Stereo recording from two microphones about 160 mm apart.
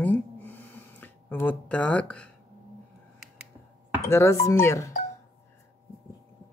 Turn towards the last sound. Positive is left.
turn(degrees=20)  # may be behind; listen again after turning